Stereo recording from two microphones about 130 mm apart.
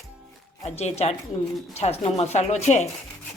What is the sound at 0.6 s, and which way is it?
Speech, 55° left (ahead or behind).